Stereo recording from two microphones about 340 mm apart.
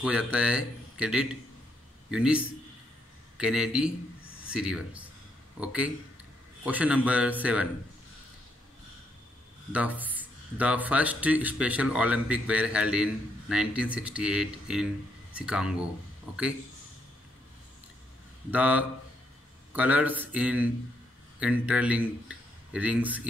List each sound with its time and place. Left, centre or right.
0.0 s a man's voice: centre
9.7 s speech: centre
18.5 s speech: centre